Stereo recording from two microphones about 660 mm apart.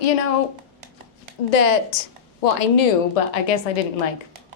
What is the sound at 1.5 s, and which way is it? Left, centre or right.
A woman's voice, left.